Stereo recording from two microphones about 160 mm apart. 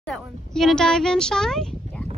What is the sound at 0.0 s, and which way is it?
Speech, 5° left (ahead or behind).